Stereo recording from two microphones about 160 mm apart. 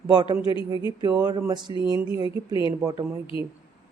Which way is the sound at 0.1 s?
25° right (ahead or behind).